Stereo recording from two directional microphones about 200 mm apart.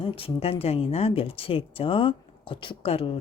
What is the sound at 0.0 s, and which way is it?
Speech, 30° left (ahead or behind).